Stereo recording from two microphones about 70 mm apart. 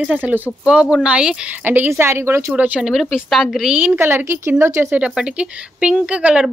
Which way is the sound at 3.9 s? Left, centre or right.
Right.